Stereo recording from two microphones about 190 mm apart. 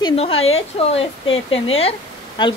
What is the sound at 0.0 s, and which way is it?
Speech, 30° left (ahead or behind).